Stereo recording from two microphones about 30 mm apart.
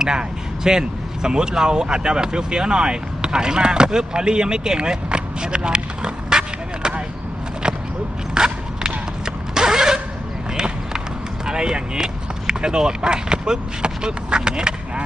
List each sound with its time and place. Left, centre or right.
0.0 s speech: right
7.6 s a sound: right
11.4 s speech: right